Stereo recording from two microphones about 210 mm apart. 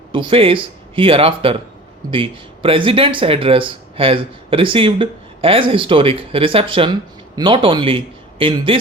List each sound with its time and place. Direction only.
0.1 s speech: 25° right (ahead or behind)